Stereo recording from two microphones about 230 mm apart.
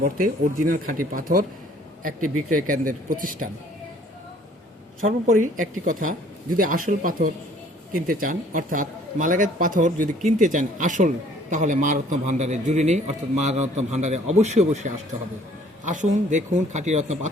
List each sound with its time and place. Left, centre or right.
0.0 s a man's voice: right
5.2 s a man's voice: right